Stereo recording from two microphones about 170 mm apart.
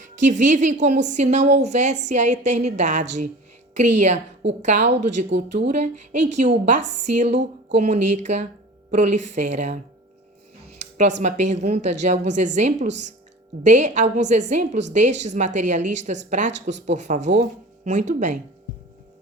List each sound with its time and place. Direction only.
0.0 s a woman's voice: 45° right (ahead or behind)
10.8 s a sound: 45° right (ahead or behind)
11.2 s a woman's voice: 45° right (ahead or behind)